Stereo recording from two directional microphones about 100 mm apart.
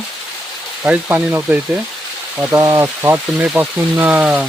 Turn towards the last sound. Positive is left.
turn(degrees=-15)  # may be behind; listen again after turning